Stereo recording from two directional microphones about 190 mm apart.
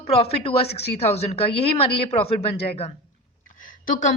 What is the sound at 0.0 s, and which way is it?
A woman's voice, 30° left (ahead or behind).